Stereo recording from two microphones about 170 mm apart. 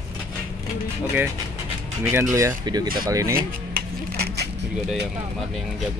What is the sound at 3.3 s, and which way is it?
Music, 60° right (ahead or behind).